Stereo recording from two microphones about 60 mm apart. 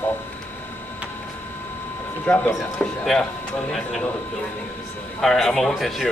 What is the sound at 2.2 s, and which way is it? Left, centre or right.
Speech, left.